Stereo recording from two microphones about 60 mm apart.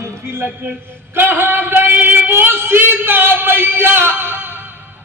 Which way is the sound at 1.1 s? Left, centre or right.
Right.